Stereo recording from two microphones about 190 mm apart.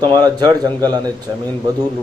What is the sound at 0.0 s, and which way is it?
A man's voice, 20° right (ahead or behind).